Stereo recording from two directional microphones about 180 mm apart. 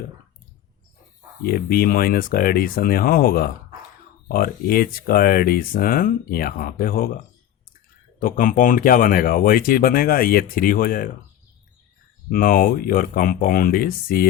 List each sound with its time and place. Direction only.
1.5 s speech: 55° left (ahead or behind)
8.2 s speech: 50° left (ahead or behind)
12.3 s speech: 50° left (ahead or behind)